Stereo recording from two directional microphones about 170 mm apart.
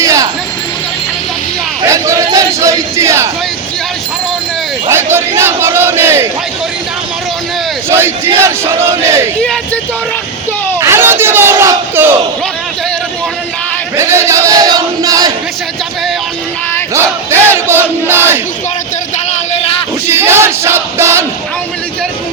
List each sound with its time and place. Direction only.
0.0 s a sound: 20° right (ahead or behind)
1.8 s a sound: 20° right (ahead or behind)
4.9 s crowd: 15° right (ahead or behind)
7.9 s speech: 15° right (ahead or behind)
10.8 s battle cry: 15° right (ahead or behind)
13.9 s battle cry: 15° right (ahead or behind)
16.9 s battle cry: 15° right (ahead or behind)
20.1 s battle cry: 15° right (ahead or behind)